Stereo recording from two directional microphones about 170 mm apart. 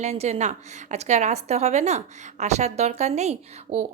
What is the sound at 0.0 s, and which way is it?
A woman's voice, 40° right (ahead or behind).